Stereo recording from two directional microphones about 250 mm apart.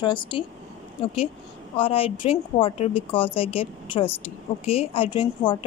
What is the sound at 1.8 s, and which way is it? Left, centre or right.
Speech, left.